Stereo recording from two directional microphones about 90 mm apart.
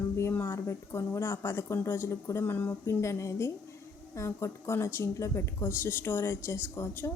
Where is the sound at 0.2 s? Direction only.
25° left (ahead or behind).